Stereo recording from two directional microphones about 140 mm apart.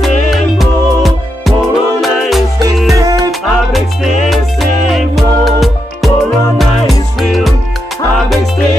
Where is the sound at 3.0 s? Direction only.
25° right (ahead or behind).